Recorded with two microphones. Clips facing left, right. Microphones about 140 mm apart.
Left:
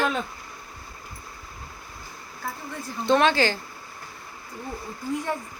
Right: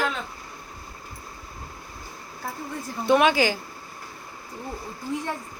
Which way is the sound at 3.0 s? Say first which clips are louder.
Right 1 dB; 10° right (ahead or behind).